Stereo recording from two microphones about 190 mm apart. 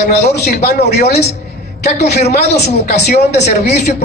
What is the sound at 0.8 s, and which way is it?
Speech, 60° left (ahead or behind).